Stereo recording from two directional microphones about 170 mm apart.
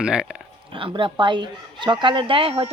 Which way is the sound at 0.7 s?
30° right (ahead or behind).